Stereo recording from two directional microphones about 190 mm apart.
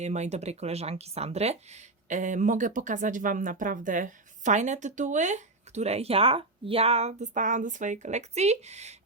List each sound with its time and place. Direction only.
0.0 s speech: 35° right (ahead or behind)